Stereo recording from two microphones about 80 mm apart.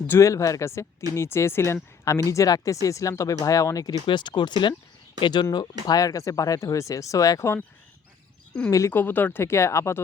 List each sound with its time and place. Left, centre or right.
0.2 s speech: left
4.0 s speech: left
5.8 s speech: left
8.9 s speech: left